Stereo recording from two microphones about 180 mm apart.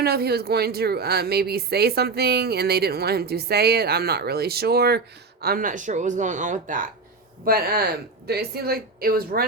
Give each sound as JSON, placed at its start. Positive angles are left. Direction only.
{"t": 0.0, "sound": "speech", "side_deg": -60}
{"t": 7.4, "sound": "speech", "side_deg": -60}